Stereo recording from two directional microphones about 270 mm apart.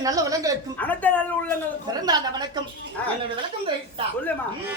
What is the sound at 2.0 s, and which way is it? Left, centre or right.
Speech, centre.